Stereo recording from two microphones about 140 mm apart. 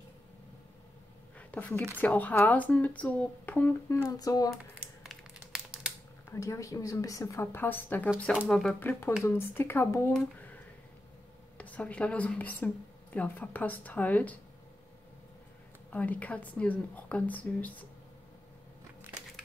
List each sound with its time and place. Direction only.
1.5 s a woman's voice: 10° left (ahead or behind)
4.0 s a woman's voice: 25° left (ahead or behind)
5.0 s a sound: 5° right (ahead or behind)
6.3 s a woman's voice: 20° left (ahead or behind)
8.5 s speech: 5° left (ahead or behind)
8.7 s a woman's voice: 15° left (ahead or behind)
11.5 s a woman's voice: 10° left (ahead or behind)
15.9 s a woman's voice: 10° left (ahead or behind)